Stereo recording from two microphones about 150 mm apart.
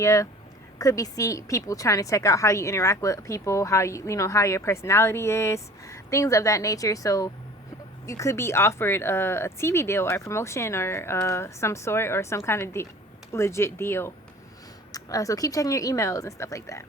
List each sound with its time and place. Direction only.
0.0 s speech: 20° left (ahead or behind)